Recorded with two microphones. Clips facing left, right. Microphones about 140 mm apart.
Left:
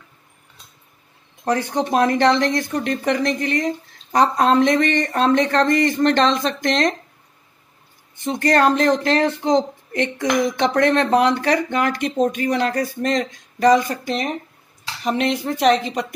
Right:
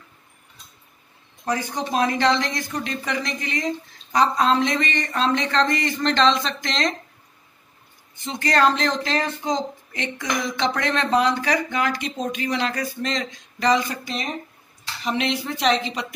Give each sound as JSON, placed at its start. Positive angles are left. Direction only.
{"t": 1.4, "sound": "a woman's voice", "side_deg": 60}
{"t": 8.2, "sound": "a woman's voice", "side_deg": 50}
{"t": 15.0, "sound": "a woman's voice", "side_deg": 45}